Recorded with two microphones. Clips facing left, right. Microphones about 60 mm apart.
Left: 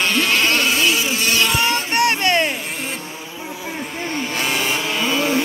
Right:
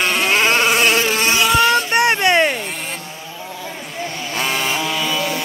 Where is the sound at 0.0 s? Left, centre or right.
Centre; by 1.2 s right.